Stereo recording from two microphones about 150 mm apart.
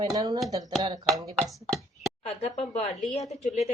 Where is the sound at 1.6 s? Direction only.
Centre (ahead or behind).